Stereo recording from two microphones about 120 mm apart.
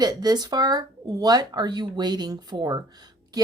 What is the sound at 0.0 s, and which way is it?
Speech, 35° right (ahead or behind).